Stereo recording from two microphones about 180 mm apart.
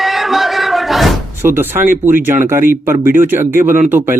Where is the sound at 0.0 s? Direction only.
Centre (ahead or behind).